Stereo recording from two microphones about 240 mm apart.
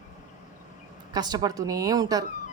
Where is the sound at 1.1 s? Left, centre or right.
Centre.